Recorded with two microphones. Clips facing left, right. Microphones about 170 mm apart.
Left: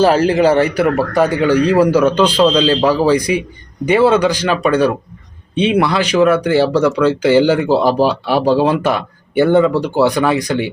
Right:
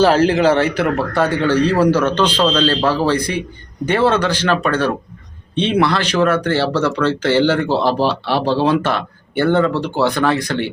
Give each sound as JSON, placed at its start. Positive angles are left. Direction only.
{"t": 0.0, "sound": "speech", "side_deg": 10}